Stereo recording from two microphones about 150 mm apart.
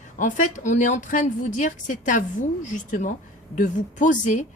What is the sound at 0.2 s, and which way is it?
A woman's voice, 60° left (ahead or behind).